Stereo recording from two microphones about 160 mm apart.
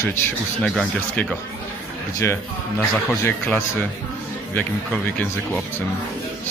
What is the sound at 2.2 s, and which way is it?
A man's voice, 15° left (ahead or behind).